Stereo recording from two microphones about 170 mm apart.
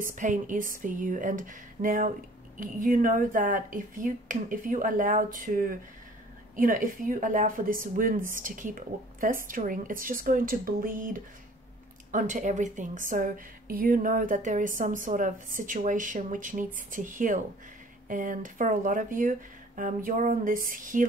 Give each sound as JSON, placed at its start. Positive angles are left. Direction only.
{"t": 0.0, "sound": "speech", "side_deg": -50}